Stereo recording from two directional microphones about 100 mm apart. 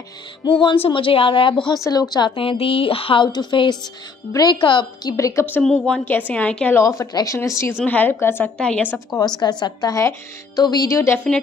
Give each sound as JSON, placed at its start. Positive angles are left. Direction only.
{"t": 0.5, "sound": "a woman's voice", "side_deg": 55}
{"t": 1.9, "sound": "a woman's voice", "side_deg": 40}
{"t": 2.3, "sound": "speech", "side_deg": 65}
{"t": 3.3, "sound": "a woman's voice", "side_deg": 45}
{"t": 4.6, "sound": "a woman's voice", "side_deg": 50}
{"t": 5.1, "sound": "speech", "side_deg": 30}
{"t": 5.6, "sound": "a woman's voice", "side_deg": 10}
{"t": 6.7, "sound": "speech", "side_deg": 30}
{"t": 7.8, "sound": "a woman's voice", "side_deg": 15}
{"t": 8.5, "sound": "a woman's voice", "side_deg": 10}
{"t": 9.4, "sound": "a woman's voice", "side_deg": 45}
{"t": 10.9, "sound": "speech", "side_deg": 30}